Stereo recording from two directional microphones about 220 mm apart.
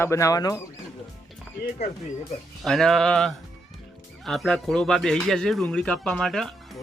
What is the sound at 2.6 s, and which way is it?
Speech, centre (ahead or behind).